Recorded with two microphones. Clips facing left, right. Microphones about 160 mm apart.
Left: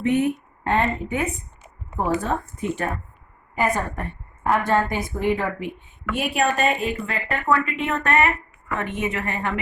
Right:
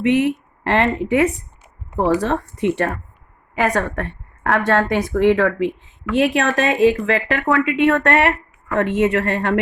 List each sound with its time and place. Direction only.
0.0 s a woman's voice: 90° right; by 9.6 s 75° right (ahead or behind)